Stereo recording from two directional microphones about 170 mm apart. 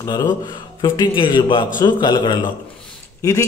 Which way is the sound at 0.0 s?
20° left (ahead or behind).